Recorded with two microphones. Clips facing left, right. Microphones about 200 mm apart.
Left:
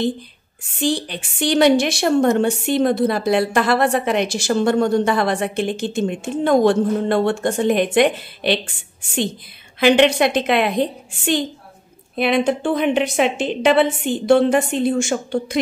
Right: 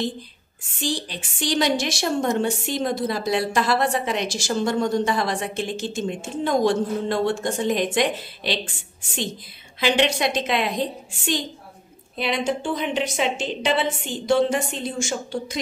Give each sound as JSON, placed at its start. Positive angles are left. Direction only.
{"t": 0.7, "sound": "a woman's voice", "side_deg": 60}
{"t": 9.8, "sound": "a woman's voice", "side_deg": 60}